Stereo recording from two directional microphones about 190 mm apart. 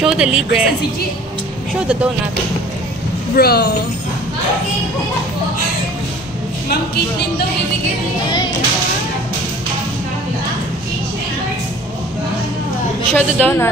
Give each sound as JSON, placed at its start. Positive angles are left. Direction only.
{"t": 0.0, "sound": "speech", "side_deg": -5}
{"t": 3.3, "sound": "speech", "side_deg": 55}
{"t": 13.1, "sound": "a woman's voice", "side_deg": 10}